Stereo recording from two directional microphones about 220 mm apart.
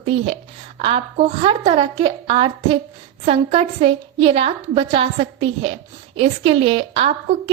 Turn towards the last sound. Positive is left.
turn(degrees=-25)  # may be behind; listen again after turning